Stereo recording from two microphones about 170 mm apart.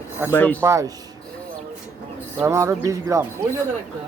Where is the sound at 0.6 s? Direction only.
15° right (ahead or behind).